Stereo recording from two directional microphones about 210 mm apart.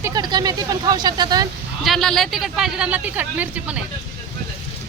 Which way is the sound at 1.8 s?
Centre (ahead or behind).